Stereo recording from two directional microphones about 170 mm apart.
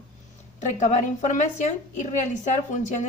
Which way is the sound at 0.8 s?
45° left (ahead or behind).